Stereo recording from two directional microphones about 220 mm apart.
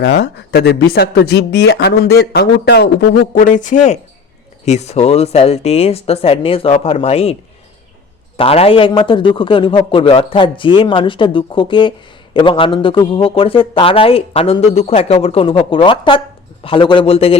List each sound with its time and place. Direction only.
0.0 s a man's voice: 50° left (ahead or behind); by 7.3 s 30° left (ahead or behind)
8.4 s a man's voice: 25° left (ahead or behind)